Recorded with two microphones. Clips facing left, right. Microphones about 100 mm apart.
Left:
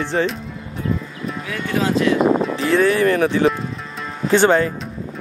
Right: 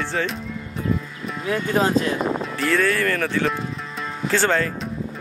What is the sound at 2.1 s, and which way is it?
Speech, 65° left (ahead or behind).